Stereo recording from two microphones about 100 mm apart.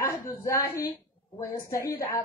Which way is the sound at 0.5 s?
35° left (ahead or behind).